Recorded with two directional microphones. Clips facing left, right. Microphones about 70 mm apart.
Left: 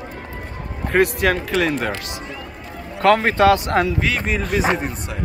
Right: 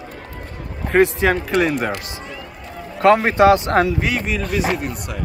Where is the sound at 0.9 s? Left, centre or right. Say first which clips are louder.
Right 2 dB; centre.